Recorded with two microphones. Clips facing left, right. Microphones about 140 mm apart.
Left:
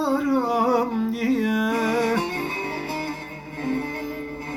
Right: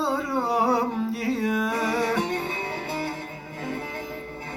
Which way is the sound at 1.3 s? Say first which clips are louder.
Left 3 dB; centre (ahead or behind).